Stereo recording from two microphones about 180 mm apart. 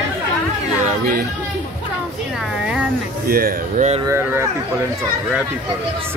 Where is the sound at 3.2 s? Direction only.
55° right (ahead or behind).